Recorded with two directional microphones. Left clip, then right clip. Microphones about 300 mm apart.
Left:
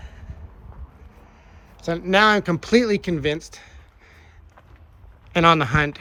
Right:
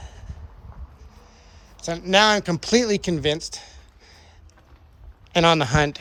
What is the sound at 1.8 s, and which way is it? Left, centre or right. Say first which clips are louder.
Speech: even; centre.